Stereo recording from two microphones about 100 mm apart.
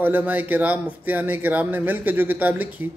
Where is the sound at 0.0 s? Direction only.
20° right (ahead or behind).